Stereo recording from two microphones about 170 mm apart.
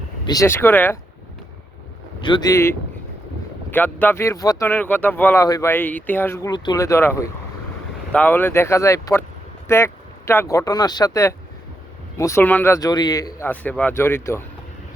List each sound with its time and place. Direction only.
0.3 s speech: 15° left (ahead or behind)
2.2 s speech: 25° left (ahead or behind)
13.5 s speech: 10° left (ahead or behind)